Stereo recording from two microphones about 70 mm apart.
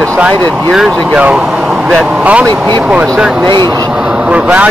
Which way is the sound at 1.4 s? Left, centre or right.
Centre.